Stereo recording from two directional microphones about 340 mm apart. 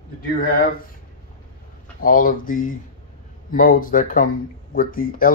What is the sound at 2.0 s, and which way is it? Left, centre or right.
Speech, left.